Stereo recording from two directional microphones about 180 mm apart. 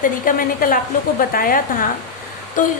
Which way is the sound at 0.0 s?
50° left (ahead or behind).